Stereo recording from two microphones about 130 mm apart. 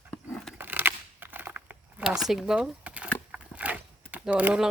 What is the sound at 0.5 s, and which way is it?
Crumpling, 15° right (ahead or behind).